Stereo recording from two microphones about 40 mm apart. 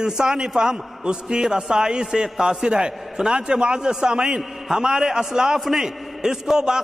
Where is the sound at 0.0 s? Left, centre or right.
Centre.